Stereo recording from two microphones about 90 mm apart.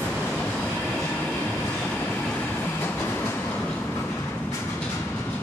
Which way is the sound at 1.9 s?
20° left (ahead or behind).